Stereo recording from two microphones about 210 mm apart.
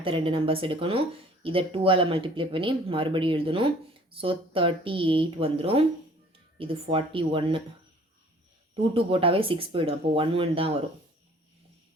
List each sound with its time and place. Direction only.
0.0 s speech: 25° right (ahead or behind)
8.7 s speech: 25° right (ahead or behind)